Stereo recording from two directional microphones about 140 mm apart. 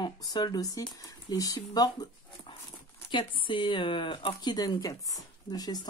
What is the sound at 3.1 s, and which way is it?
Speech, 35° left (ahead or behind).